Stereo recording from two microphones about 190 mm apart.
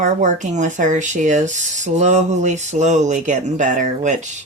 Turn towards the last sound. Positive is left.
turn(degrees=-40)  # may be behind; listen again after turning